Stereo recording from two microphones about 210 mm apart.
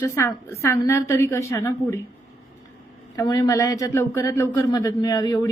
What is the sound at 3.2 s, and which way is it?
A woman's voice, 15° left (ahead or behind).